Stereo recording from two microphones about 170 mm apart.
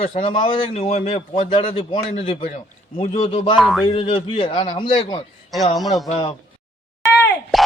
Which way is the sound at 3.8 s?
30° left (ahead or behind).